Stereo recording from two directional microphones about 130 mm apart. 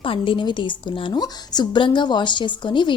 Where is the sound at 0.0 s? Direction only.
40° left (ahead or behind).